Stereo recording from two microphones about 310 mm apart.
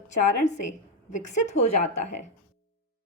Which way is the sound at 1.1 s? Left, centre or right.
Left.